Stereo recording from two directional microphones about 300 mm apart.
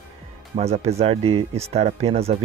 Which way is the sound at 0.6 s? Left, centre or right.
Right.